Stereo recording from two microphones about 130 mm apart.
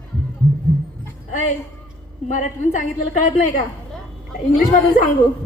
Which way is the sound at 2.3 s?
75° left (ahead or behind).